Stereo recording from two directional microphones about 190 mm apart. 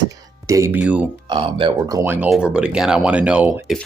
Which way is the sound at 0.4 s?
15° right (ahead or behind).